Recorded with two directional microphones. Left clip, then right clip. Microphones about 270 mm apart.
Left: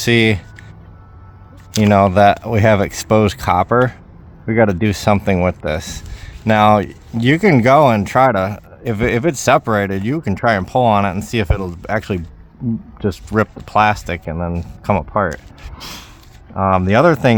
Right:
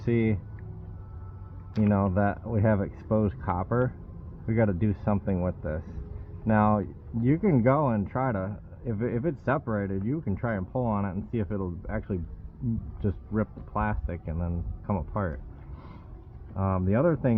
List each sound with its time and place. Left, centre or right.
0.0 s speech: left
1.9 s speech: left
16.6 s speech: left